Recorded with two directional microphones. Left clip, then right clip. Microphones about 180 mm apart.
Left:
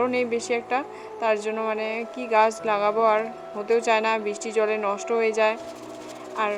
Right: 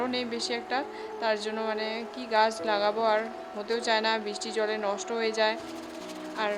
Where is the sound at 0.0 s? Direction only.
10° left (ahead or behind).